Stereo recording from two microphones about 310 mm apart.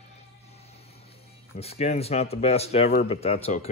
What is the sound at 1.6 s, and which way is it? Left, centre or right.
Speech, left.